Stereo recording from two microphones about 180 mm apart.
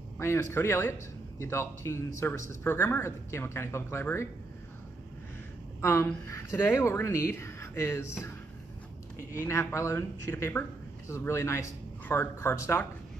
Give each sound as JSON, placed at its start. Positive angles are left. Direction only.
{"t": 0.2, "sound": "speech", "side_deg": 15}
{"t": 5.8, "sound": "a woman's voice", "side_deg": 15}
{"t": 9.3, "sound": "speech", "side_deg": 15}